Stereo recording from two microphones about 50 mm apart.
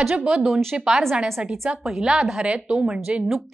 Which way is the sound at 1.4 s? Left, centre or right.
Centre.